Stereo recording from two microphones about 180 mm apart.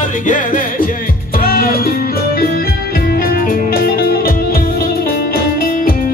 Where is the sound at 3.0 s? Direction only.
55° left (ahead or behind).